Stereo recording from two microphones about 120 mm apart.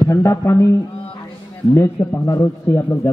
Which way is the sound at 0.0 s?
20° left (ahead or behind).